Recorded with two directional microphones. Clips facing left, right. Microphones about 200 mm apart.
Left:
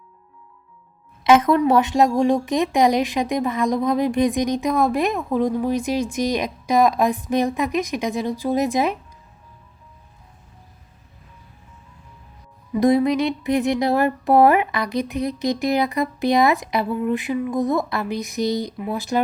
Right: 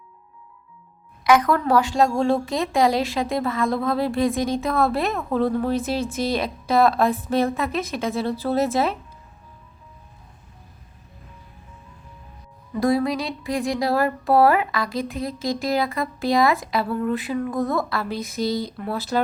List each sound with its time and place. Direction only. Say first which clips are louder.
1.2 s a woman's voice: left 3 dB; 25° left (ahead or behind)
12.7 s music: left 4 dB; 20° left (ahead or behind)
18.8 s a woman's voice: left 1 dB; 15° left (ahead or behind)